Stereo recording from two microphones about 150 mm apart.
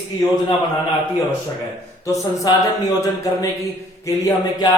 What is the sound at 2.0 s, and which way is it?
Speech, 20° left (ahead or behind).